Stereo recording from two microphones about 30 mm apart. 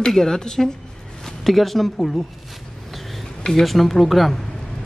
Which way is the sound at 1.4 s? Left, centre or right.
Centre.